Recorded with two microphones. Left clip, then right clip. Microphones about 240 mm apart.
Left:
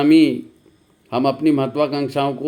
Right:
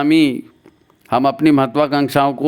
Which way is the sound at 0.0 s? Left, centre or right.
Right.